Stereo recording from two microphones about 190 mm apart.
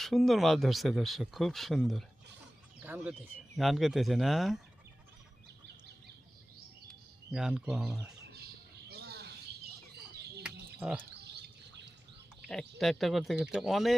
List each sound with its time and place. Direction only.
0.0 s speech: centre (ahead or behind)
7.3 s speech: 5° right (ahead or behind)
8.2 s bird: 60° right (ahead or behind)
10.4 s a sound: 5° right (ahead or behind)
11.2 s bird: 60° right (ahead or behind)
12.8 s speech: centre (ahead or behind)